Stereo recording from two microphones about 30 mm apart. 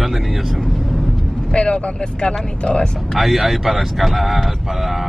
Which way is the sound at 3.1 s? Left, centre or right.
Centre.